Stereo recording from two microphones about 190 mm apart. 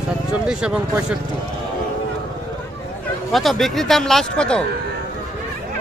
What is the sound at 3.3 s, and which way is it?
Speech, centre (ahead or behind).